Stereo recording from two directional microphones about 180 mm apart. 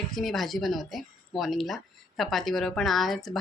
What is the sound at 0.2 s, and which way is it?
A woman's voice, centre (ahead or behind).